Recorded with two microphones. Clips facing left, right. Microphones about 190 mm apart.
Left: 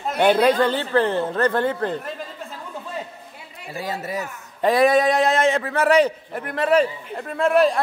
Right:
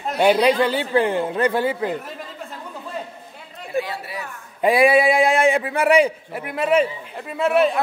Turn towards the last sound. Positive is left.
turn(degrees=0)  # may be behind; listen again after turning